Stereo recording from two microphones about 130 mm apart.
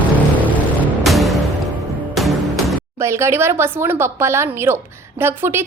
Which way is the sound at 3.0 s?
20° right (ahead or behind).